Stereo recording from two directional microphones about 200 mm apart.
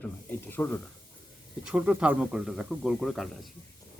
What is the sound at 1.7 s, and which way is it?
Speech, 5° right (ahead or behind).